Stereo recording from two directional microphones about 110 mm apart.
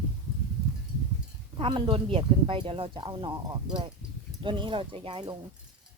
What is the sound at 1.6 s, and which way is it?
Speech, 50° right (ahead or behind).